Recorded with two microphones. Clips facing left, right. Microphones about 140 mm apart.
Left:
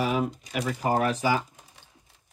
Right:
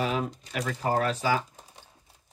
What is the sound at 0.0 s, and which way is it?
Speech, 10° left (ahead or behind).